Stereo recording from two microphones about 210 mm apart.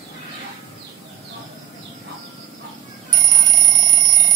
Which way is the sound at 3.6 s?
20° right (ahead or behind).